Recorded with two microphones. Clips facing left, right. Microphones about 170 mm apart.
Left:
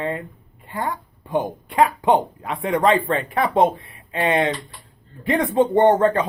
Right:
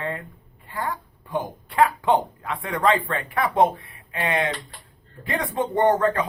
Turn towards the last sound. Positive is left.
turn(degrees=20)  # may be behind; listen again after turning